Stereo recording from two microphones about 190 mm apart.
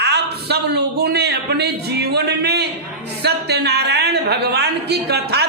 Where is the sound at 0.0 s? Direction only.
60° right (ahead or behind).